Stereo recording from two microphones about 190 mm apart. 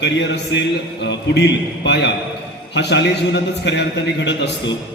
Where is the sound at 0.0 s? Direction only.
70° left (ahead or behind).